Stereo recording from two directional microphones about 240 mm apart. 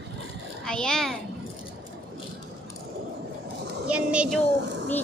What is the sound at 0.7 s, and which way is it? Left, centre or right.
Speech, centre.